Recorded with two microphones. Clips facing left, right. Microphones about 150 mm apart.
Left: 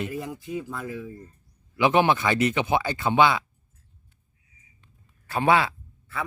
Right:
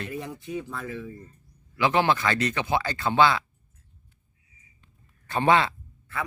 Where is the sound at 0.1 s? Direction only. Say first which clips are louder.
Left 1 dB; 5° left (ahead or behind).